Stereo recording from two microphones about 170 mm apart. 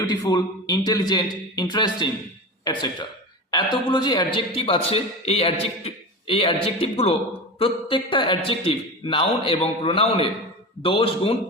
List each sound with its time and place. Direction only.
0.1 s a man's voice: 25° left (ahead or behind)